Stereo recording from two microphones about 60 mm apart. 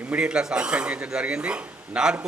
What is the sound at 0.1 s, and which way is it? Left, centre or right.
Speech, centre.